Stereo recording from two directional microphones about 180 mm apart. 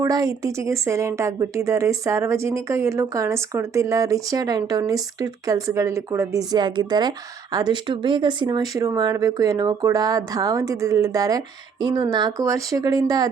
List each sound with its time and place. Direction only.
0.0 s a woman's voice: 20° right (ahead or behind)